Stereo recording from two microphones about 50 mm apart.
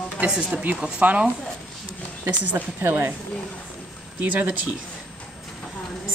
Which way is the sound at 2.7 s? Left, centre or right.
Right.